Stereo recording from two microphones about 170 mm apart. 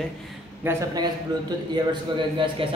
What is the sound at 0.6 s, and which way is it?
Speech, 20° right (ahead or behind).